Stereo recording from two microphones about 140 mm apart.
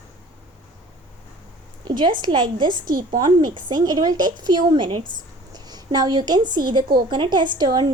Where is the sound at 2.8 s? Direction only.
80° right.